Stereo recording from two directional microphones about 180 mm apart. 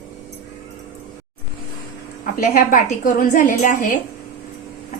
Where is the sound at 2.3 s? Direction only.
50° left (ahead or behind).